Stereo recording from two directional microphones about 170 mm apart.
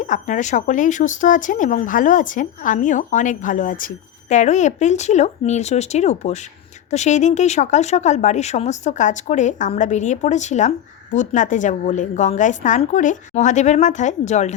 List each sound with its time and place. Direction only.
0.0 s speech: 45° left (ahead or behind)